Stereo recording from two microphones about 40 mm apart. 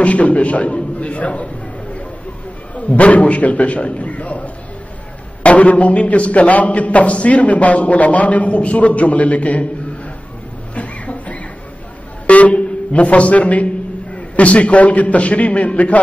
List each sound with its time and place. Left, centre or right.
0.0 s a man's voice: left
2.9 s a man's voice: left
10.7 s a sound: left
12.3 s a man's voice: left